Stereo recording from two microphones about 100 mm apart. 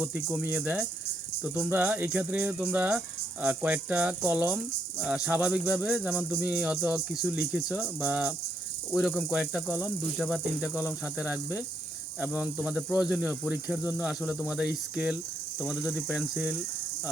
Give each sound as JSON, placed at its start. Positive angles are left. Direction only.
{"t": 0.0, "sound": "speech", "side_deg": -15}